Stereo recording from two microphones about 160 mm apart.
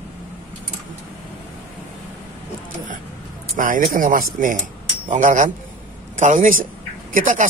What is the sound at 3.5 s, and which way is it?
A man's voice, 60° right (ahead or behind).